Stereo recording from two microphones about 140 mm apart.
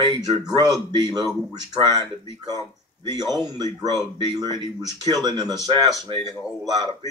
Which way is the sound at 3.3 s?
30° right (ahead or behind).